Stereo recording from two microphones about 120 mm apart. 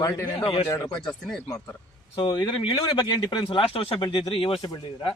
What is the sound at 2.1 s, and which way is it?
A man's voice, 40° left (ahead or behind).